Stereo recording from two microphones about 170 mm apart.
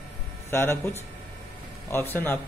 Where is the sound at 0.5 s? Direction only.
15° left (ahead or behind).